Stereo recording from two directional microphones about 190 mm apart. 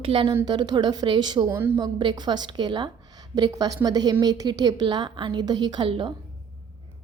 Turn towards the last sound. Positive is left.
turn(degrees=-25)  # may be behind; listen again after turning